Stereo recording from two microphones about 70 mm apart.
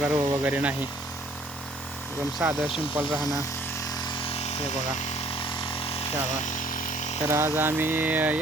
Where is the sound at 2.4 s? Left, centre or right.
Right.